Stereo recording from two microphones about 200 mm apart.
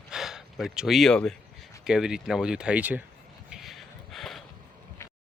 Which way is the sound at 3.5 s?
Centre (ahead or behind).